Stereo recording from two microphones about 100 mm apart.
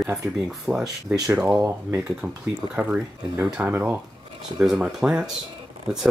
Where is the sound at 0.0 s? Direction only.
5° right (ahead or behind).